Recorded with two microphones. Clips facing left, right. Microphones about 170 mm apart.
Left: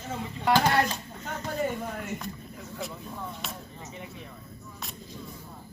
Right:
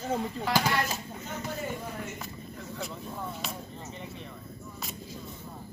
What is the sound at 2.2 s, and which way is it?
Speech, centre (ahead or behind).